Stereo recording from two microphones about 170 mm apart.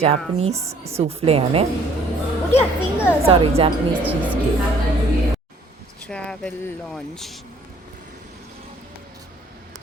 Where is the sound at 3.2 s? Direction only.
35° right (ahead or behind).